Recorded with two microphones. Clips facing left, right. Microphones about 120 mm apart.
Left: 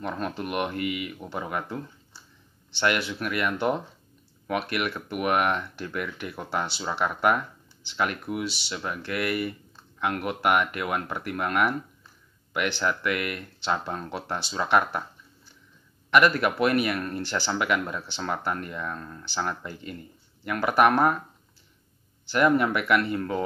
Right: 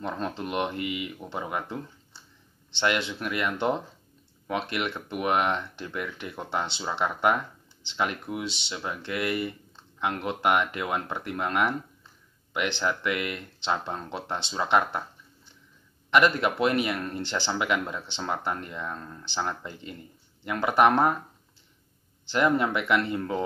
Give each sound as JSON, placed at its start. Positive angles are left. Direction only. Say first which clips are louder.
{"t": 0.0, "sound": "speech", "louder": "left 1 dB", "side_deg": -25}
{"t": 16.1, "sound": "speech", "louder": "left 1 dB", "side_deg": -25}
{"t": 22.2, "sound": "speech", "louder": "left 2 dB", "side_deg": -25}